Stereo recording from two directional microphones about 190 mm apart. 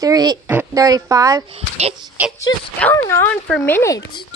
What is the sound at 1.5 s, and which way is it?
Speech, 35° right (ahead or behind).